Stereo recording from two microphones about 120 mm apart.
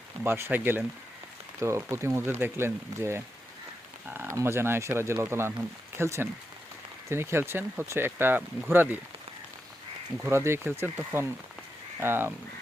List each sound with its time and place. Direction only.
0.3 s speech: 20° right (ahead or behind)
10.2 s speech: 20° right (ahead or behind)